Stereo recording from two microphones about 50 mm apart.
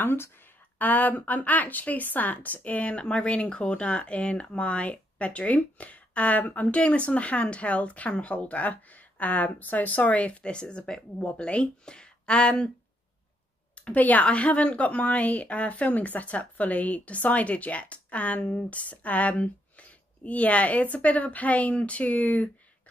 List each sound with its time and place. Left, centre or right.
0.0 s speech: left
0.7 s a woman's voice: left; by 12.7 s centre
13.7 s a woman's voice: left